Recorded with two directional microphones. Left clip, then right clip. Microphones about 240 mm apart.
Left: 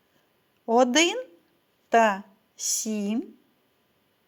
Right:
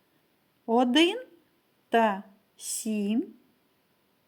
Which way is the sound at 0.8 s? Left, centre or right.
Centre.